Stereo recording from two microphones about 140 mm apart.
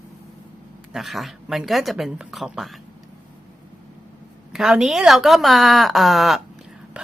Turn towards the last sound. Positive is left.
turn(degrees=0)  # may be behind; listen again after turning